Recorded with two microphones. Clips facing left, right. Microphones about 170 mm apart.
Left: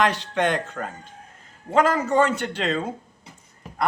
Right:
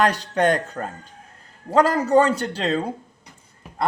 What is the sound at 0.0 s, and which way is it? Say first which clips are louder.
A man's voice: right 3 dB; 40° right (ahead or behind).